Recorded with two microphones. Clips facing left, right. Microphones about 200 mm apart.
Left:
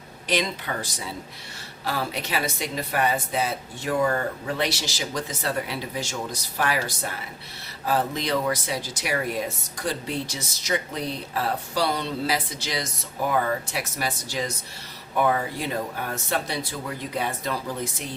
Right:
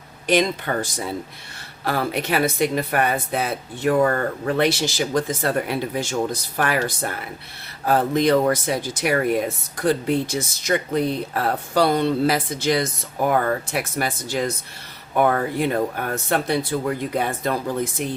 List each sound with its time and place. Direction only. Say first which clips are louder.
0.3 s speech: right 7 dB; 50° right (ahead or behind)